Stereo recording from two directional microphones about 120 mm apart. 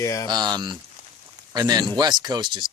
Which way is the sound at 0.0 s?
25° left (ahead or behind).